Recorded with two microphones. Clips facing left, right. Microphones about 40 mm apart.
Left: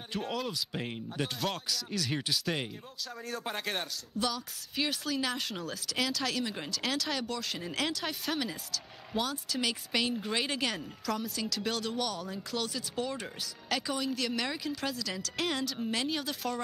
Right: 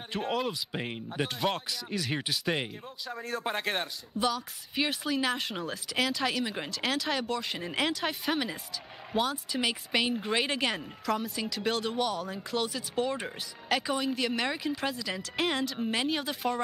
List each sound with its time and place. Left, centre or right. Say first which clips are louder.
0.1 s a woman's voice: right 4 dB; centre